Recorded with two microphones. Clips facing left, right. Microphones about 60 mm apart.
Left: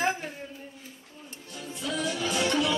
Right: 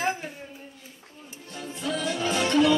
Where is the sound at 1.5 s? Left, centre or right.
Right.